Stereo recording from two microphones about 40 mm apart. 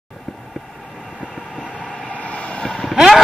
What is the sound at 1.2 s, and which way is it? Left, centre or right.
Vehicle, centre.